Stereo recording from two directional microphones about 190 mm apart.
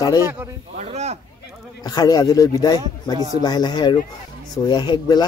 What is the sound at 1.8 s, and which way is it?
A man's voice, 20° left (ahead or behind).